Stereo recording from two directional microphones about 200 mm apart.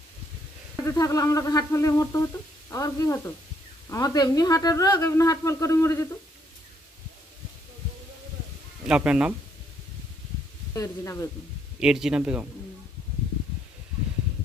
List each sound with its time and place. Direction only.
0.8 s speech: 15° left (ahead or behind)
8.8 s speech: 5° right (ahead or behind)
10.8 s speech: 15° left (ahead or behind)
11.8 s speech: 5° right (ahead or behind)